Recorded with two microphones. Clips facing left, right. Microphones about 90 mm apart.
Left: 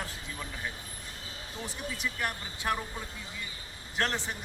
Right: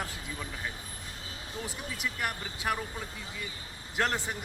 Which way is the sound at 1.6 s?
10° right (ahead or behind).